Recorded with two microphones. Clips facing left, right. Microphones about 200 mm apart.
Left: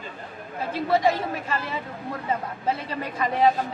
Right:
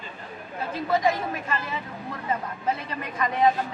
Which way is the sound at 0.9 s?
30° left (ahead or behind).